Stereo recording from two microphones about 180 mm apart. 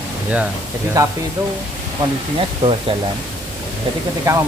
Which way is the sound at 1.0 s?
20° right (ahead or behind).